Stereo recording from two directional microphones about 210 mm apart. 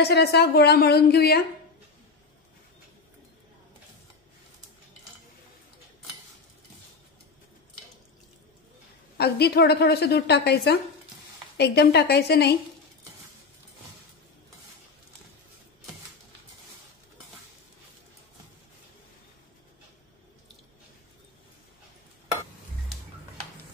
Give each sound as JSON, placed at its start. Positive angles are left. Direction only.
{"t": 0.0, "sound": "a woman's voice", "side_deg": 50}
{"t": 9.2, "sound": "a woman's voice", "side_deg": 50}